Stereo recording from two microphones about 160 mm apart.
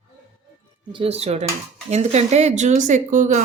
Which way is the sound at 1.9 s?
45° right (ahead or behind).